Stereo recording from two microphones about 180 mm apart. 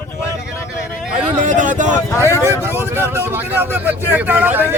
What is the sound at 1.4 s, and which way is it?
Speech, 45° right (ahead or behind).